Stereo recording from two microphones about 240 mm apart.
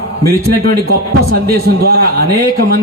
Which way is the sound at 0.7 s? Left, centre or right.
Right.